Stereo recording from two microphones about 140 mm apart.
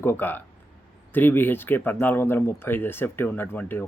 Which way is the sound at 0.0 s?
15° left (ahead or behind).